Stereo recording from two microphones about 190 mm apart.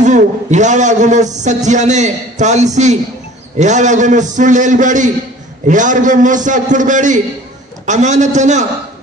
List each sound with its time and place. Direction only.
0.0 s a man's voice: 40° right (ahead or behind)